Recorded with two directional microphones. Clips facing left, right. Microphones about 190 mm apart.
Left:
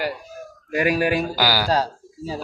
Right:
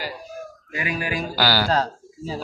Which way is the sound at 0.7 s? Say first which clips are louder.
Left 9 dB; 65° left (ahead or behind).